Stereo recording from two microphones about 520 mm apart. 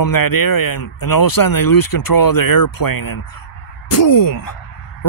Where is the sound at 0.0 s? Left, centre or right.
Left.